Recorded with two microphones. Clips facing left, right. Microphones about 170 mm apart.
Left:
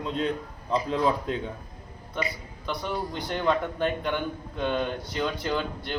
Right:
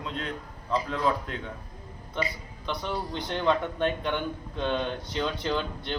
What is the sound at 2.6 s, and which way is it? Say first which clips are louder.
A man's voice: left 1 dB; 5° left (ahead or behind).